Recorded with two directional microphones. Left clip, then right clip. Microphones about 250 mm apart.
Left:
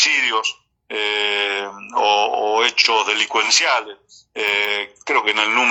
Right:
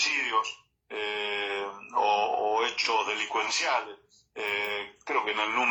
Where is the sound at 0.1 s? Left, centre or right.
Left.